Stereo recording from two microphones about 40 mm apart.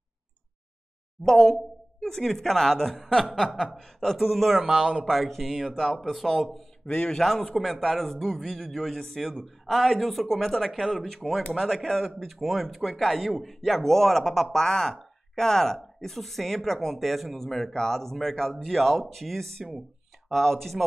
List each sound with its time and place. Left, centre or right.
1.2 s speech: centre
4.6 s speech: centre
5.0 s speech: centre
6.9 s a man's voice: left
7.2 s speech: centre
12.2 s speech: centre